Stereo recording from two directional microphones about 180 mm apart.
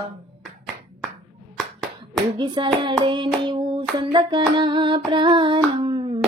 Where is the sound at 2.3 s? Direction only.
25° right (ahead or behind).